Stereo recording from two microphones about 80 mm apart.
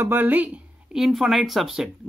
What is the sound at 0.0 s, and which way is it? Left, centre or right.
Speech, right.